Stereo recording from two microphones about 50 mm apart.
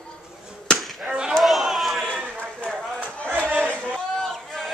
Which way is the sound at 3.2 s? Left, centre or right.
Right.